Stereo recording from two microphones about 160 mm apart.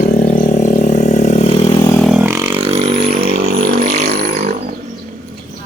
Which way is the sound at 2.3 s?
20° right (ahead or behind).